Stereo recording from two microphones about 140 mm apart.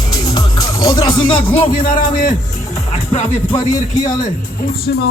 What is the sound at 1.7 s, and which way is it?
Speech, 75° left (ahead or behind).